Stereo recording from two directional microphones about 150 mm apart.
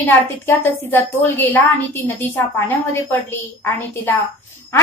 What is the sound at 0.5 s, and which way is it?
A woman's voice, 15° left (ahead or behind).